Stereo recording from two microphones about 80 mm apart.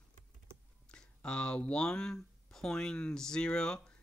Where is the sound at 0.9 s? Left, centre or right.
Centre.